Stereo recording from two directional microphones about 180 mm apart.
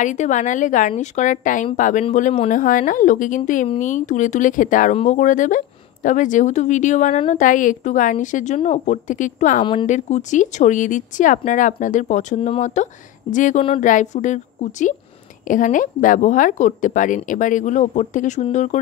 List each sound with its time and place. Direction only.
0.0 s a woman's voice: 45° left (ahead or behind)